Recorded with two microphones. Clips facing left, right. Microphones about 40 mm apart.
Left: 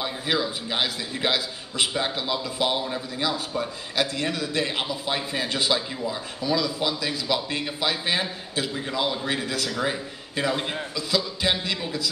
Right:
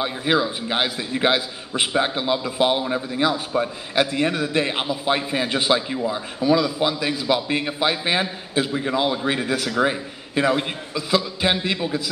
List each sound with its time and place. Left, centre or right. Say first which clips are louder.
0.0 s a man's voice: right 5 dB; right